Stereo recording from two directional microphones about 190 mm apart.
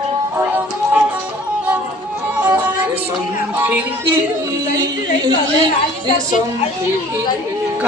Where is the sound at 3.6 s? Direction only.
10° right (ahead or behind).